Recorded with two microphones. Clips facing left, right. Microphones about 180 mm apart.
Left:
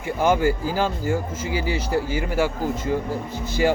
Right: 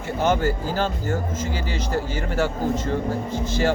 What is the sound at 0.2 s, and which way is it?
Speech, 10° left (ahead or behind).